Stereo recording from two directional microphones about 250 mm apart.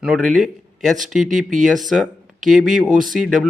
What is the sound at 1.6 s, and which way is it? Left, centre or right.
Speech, centre.